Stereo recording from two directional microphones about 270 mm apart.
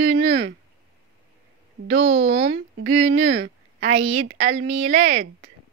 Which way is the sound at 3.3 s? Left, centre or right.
Right.